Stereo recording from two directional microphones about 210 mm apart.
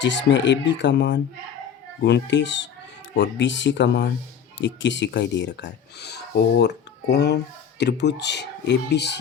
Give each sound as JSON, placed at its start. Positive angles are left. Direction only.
{"t": 0.0, "sound": "speech", "side_deg": 60}